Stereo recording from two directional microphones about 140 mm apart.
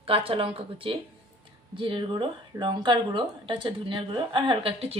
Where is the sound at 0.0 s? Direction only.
40° right (ahead or behind).